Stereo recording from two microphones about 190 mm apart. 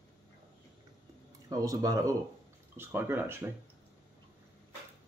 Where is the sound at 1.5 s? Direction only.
15° right (ahead or behind).